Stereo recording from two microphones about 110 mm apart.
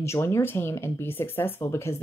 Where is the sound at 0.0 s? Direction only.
25° left (ahead or behind).